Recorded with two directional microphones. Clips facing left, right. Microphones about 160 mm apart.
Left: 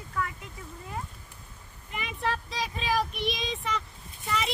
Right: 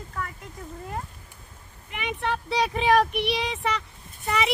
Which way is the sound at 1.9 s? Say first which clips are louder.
Right 3 dB; 70° right (ahead or behind).